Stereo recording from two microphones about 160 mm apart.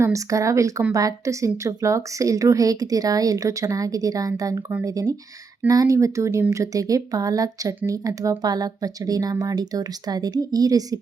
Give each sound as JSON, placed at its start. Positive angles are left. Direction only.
{"t": 0.0, "sound": "a woman's voice", "side_deg": -20}